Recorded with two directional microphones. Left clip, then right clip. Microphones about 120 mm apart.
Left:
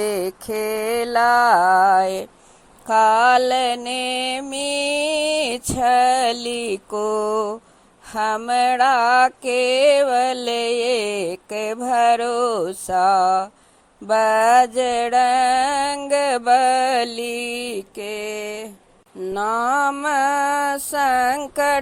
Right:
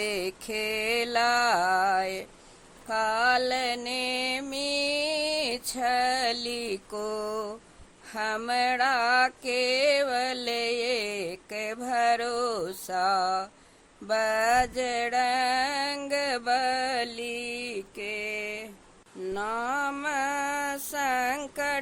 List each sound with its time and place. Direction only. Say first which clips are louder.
0.0 s mantra: left 8 dB; 30° left (ahead or behind)
2.9 s music: left 11 dB; 40° left (ahead or behind)
16.0 s mantra: left 12 dB; 40° left (ahead or behind)